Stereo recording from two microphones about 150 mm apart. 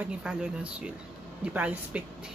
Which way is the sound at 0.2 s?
5° right (ahead or behind).